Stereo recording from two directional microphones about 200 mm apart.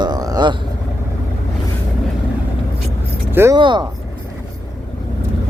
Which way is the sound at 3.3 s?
10° right (ahead or behind).